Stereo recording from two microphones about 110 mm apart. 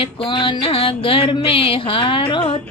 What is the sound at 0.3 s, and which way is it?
Music, 50° left (ahead or behind).